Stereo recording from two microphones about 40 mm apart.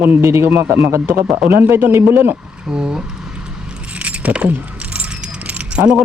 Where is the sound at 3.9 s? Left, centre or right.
Right.